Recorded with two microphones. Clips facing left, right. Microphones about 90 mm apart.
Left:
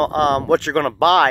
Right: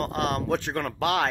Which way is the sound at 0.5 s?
70° left (ahead or behind).